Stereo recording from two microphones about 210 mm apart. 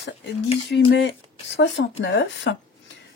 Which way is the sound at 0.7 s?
55° left (ahead or behind).